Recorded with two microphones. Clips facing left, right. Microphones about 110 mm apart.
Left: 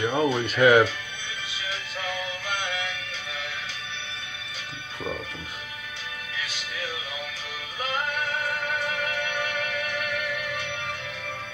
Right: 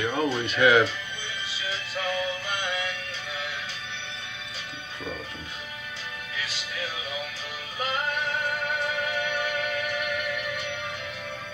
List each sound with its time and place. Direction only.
0.0 s music: 20° left (ahead or behind)
0.6 s speech: 45° left (ahead or behind)